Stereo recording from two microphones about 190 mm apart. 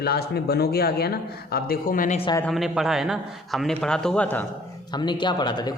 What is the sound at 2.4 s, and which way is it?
A man's voice, centre (ahead or behind).